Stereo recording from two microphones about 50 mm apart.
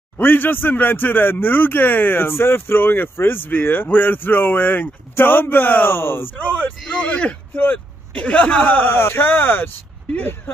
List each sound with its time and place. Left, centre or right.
0.2 s speech: left
6.9 s speech: left
7.5 s speech: left
8.1 s speech: left
10.1 s speech: left